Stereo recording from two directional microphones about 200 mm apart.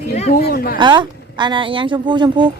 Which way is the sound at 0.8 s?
20° right (ahead or behind).